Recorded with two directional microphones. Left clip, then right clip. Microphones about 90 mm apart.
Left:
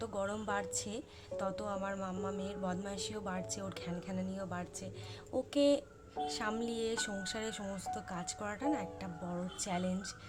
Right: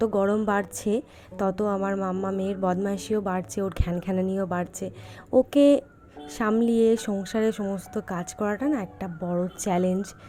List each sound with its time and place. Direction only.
0.0 s speech: 75° right (ahead or behind)
0.4 s speech: 90° right
1.7 s a sound: 45° right (ahead or behind)
2.4 s speech: 90° right
6.2 s a woman's voice: 75° right (ahead or behind); by 7.8 s 55° right (ahead or behind)
7.8 s speech: 85° right